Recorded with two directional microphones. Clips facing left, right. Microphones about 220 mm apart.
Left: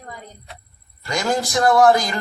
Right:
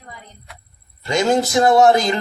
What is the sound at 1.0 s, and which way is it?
A man's voice, 25° right (ahead or behind).